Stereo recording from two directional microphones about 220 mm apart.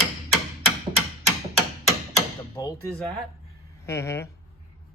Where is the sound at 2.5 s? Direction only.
15° left (ahead or behind).